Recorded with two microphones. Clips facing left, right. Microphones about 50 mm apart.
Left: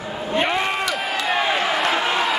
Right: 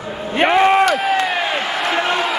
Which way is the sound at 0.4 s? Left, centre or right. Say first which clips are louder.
Right 10 dB; right.